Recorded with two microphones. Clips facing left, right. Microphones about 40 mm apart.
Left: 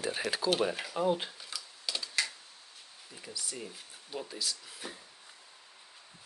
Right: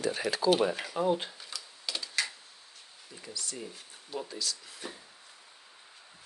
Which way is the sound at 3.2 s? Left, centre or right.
Centre.